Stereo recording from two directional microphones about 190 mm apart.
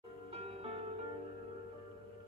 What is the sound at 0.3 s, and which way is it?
Music, 30° right (ahead or behind).